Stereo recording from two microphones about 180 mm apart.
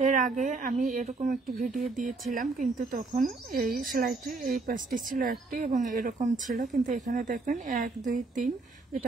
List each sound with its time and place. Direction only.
0.0 s speech: 45° right (ahead or behind)